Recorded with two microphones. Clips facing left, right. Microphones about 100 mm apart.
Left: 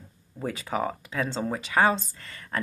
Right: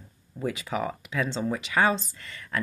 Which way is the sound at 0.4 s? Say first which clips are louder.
Even; 40° left (ahead or behind).